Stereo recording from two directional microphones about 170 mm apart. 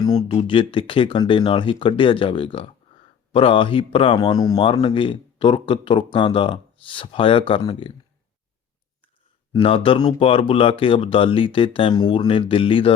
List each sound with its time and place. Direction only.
0.0 s speech: 20° left (ahead or behind)
0.3 s speech: 35° left (ahead or behind)
9.5 s speech: 30° left (ahead or behind)